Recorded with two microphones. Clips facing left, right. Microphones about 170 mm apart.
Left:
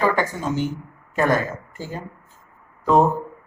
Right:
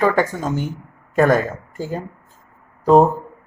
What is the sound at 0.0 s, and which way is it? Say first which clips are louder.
Speech: right 3 dB; 45° right (ahead or behind).